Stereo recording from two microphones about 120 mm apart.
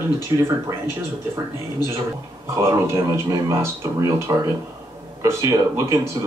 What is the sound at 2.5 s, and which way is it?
Speech, 25° right (ahead or behind).